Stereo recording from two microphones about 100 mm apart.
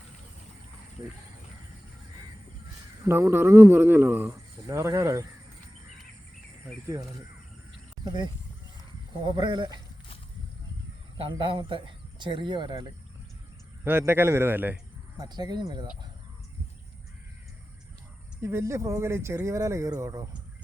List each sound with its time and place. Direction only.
3.0 s speech: 25° right (ahead or behind)
6.8 s speech: 35° right (ahead or behind)
8.0 s speech: 50° right (ahead or behind)
11.2 s speech: 60° right (ahead or behind)
13.8 s speech: 25° right (ahead or behind)
15.2 s speech: 45° right (ahead or behind)
18.3 s speech: 25° right (ahead or behind)